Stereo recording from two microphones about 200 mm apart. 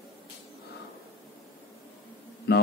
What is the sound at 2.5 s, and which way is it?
Speech, 55° left (ahead or behind).